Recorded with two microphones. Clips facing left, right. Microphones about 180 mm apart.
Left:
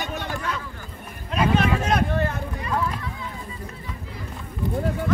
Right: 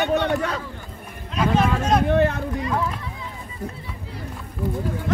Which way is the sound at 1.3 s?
65° left (ahead or behind).